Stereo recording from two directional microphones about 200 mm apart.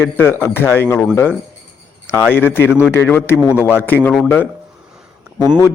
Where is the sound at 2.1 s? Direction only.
10° left (ahead or behind).